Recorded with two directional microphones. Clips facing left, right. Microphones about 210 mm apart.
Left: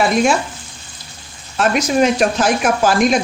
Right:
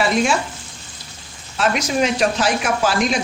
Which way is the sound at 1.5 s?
50° left (ahead or behind).